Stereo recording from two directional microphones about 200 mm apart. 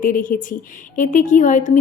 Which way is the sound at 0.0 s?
45° left (ahead or behind).